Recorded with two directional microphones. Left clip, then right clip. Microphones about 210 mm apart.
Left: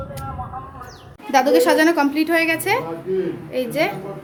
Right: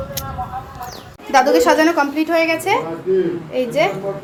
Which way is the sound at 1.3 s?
15° left (ahead or behind).